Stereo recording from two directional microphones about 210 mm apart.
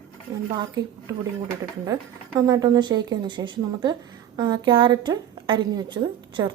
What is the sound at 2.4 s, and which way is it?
A woman's voice, 15° right (ahead or behind).